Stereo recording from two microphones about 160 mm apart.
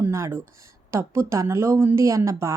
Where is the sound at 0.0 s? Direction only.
15° right (ahead or behind).